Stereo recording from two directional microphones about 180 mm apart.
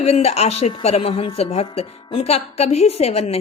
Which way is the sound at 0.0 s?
35° left (ahead or behind).